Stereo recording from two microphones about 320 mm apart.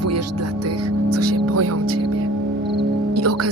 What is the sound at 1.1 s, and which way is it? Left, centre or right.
Music, right.